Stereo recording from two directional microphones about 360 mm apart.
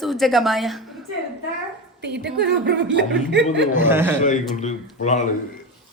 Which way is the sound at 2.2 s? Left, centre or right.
Right.